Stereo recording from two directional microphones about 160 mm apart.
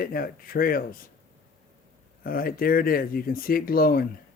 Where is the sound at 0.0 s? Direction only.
65° left (ahead or behind).